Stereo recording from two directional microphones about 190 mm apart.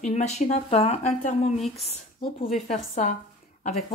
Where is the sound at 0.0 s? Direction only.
35° left (ahead or behind).